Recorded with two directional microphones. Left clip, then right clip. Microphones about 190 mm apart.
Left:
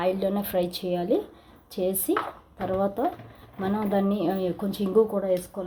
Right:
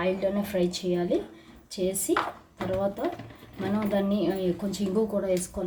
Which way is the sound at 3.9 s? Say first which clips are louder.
Left 1 dB; 40° left (ahead or behind).